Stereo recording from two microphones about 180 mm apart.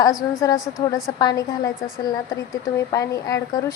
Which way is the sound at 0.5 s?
Centre (ahead or behind).